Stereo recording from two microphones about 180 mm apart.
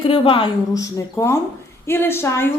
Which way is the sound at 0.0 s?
30° left (ahead or behind).